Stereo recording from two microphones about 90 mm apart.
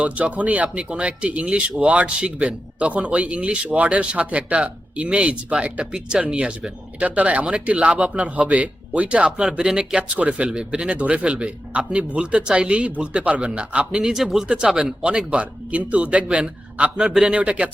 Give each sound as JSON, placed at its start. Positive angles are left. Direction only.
{"t": 0.0, "sound": "speech", "side_deg": -15}